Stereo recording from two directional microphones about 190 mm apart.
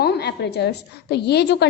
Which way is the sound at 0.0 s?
60° left (ahead or behind).